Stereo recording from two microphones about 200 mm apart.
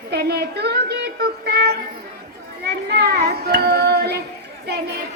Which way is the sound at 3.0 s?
50° right (ahead or behind).